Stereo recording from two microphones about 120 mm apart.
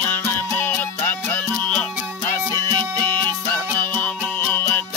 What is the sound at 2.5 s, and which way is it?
Music, 35° right (ahead or behind).